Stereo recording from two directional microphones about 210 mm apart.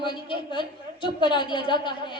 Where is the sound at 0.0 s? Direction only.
20° left (ahead or behind).